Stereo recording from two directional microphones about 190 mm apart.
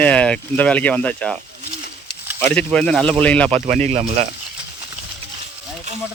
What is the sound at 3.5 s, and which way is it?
Speech, 35° right (ahead or behind).